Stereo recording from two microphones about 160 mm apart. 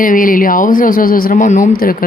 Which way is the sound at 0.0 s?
60° left (ahead or behind).